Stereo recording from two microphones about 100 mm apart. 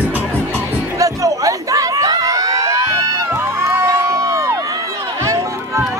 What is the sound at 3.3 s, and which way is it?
Music, 25° right (ahead or behind).